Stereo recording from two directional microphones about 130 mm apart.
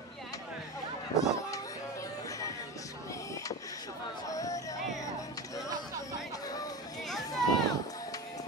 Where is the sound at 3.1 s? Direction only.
25° left (ahead or behind).